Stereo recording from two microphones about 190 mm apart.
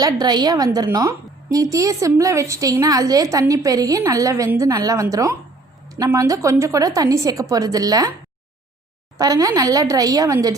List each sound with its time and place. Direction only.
0.0 s a woman's voice: 20° right (ahead or behind)
9.1 s speech: 20° right (ahead or behind)